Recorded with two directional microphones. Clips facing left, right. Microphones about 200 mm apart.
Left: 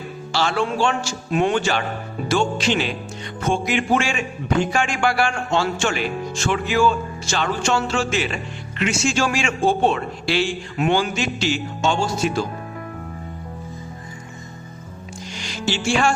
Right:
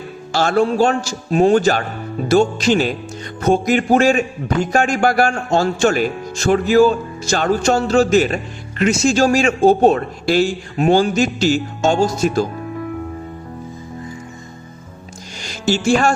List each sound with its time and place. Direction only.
0.3 s a man's voice: 45° right (ahead or behind)
15.4 s music: 40° right (ahead or behind)